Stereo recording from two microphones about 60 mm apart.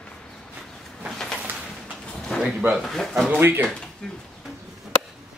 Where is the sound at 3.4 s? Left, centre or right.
Right.